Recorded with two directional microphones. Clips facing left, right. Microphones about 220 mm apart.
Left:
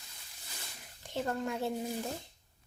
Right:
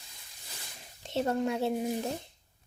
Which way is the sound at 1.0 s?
20° right (ahead or behind).